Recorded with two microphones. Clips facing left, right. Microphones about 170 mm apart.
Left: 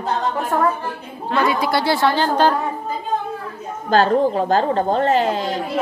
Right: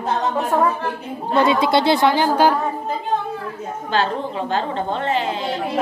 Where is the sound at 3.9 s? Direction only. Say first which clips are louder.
Left 7 dB; 40° left (ahead or behind).